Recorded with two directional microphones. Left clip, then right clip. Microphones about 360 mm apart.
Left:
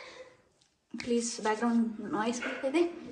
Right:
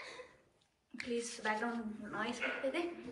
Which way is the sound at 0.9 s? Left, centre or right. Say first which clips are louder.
Left 8 dB; centre.